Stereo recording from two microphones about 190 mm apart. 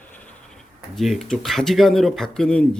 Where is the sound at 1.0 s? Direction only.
Centre (ahead or behind).